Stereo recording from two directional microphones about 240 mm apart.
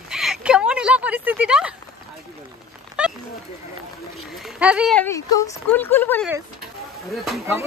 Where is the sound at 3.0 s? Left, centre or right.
Centre.